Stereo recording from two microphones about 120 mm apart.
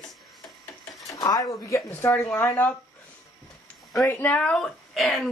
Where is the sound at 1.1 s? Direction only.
30° left (ahead or behind); by 2.8 s 15° left (ahead or behind).